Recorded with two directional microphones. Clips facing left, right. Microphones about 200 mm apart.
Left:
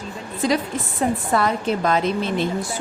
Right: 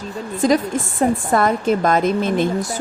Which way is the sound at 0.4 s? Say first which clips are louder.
Right 5 dB; 45° right (ahead or behind).